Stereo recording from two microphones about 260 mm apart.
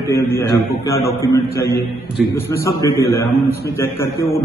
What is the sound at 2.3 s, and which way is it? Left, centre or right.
A man's voice, centre.